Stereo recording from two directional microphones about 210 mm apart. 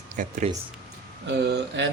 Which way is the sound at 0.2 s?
35° right (ahead or behind).